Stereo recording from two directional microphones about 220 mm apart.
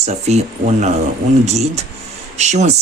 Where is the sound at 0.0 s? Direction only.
30° right (ahead or behind).